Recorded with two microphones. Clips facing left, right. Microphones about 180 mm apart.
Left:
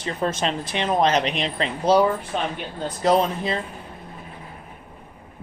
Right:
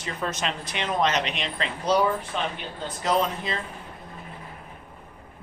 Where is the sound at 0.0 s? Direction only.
30° left (ahead or behind).